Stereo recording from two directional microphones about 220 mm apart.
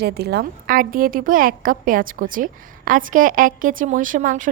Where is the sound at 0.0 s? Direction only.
45° right (ahead or behind).